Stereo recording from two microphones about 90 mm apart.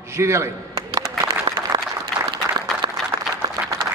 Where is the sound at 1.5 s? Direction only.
50° right (ahead or behind).